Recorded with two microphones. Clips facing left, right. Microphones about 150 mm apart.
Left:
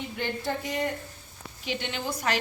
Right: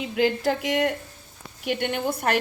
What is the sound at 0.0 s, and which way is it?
Speech, 90° right.